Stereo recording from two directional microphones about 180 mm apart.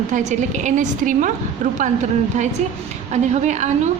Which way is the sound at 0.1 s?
40° right (ahead or behind).